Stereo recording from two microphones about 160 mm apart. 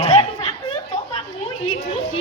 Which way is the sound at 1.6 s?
40° left (ahead or behind).